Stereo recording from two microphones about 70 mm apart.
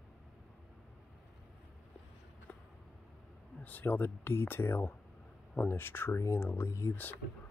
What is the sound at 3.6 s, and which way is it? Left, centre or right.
Speech, left.